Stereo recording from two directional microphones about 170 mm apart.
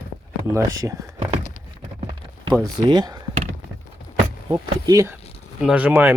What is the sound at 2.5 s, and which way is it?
Speech, 25° right (ahead or behind).